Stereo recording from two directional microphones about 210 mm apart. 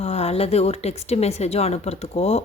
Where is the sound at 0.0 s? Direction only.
30° left (ahead or behind).